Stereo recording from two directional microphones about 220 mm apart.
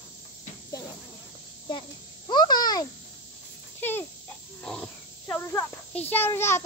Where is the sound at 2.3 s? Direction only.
20° left (ahead or behind).